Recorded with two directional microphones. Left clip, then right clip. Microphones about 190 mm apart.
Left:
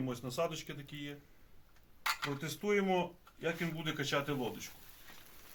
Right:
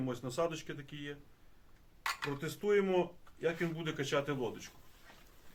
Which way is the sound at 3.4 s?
30° right (ahead or behind).